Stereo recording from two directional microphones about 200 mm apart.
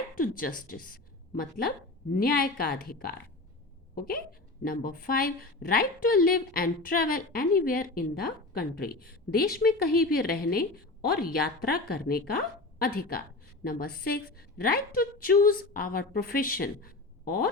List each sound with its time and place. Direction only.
0.2 s a woman's voice: 45° left (ahead or behind)